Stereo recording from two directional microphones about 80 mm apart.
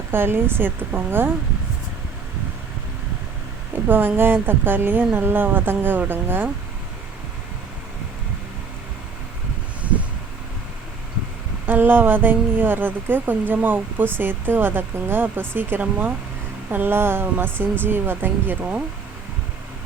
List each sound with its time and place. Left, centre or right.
0.1 s speech: right
3.8 s speech: right
11.6 s speech: right